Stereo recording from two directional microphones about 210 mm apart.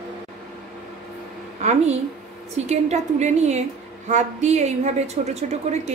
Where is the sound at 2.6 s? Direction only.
30° right (ahead or behind).